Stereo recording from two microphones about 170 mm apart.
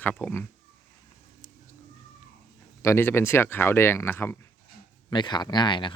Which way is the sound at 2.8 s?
15° left (ahead or behind).